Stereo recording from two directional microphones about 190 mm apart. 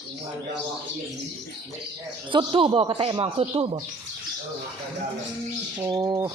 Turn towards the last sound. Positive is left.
turn(degrees=-15)  # may be behind; listen again after turning